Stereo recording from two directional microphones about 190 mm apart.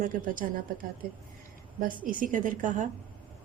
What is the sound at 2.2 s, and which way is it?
Speech, 45° right (ahead or behind).